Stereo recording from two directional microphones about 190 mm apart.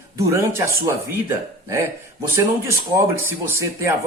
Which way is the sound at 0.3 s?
15° right (ahead or behind).